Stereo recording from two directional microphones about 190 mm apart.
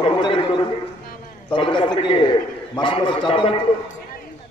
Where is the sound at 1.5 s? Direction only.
25° left (ahead or behind).